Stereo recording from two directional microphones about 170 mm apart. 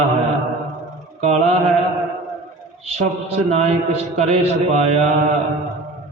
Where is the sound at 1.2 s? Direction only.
40° right (ahead or behind).